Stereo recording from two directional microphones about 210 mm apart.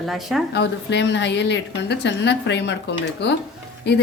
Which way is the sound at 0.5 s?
55° left (ahead or behind).